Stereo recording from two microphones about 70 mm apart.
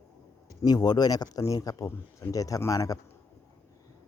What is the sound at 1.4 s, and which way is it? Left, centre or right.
A man's voice, left.